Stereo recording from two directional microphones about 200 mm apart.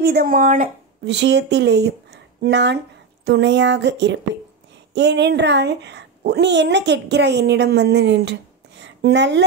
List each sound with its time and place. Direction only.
0.0 s speech: 50° right (ahead or behind)
1.1 s a woman's voice: 60° right (ahead or behind)